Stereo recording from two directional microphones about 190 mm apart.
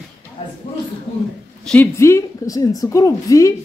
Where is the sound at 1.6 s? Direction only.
10° left (ahead or behind).